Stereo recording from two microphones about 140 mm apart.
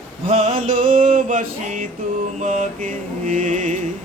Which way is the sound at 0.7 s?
75° right (ahead or behind).